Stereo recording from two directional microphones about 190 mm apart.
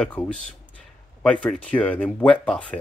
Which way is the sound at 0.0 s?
5° left (ahead or behind).